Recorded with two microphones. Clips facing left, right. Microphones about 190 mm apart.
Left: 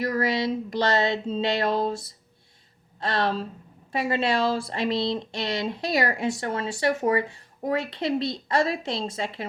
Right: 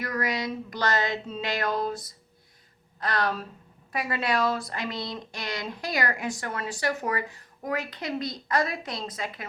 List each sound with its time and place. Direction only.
0.0 s speech: 30° left (ahead or behind)